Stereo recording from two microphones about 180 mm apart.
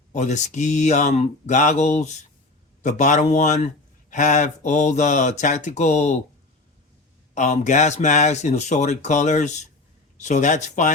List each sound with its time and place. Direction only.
0.1 s speech: 40° left (ahead or behind)
7.3 s speech: 40° left (ahead or behind)